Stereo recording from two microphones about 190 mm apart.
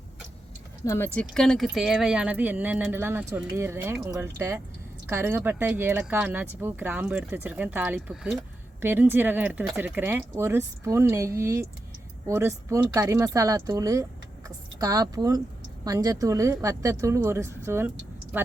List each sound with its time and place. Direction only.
0.9 s speech: 10° left (ahead or behind); by 18.5 s 10° right (ahead or behind)